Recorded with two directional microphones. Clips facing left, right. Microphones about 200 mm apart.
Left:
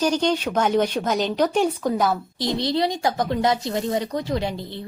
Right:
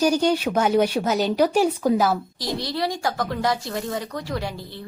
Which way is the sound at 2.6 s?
20° left (ahead or behind).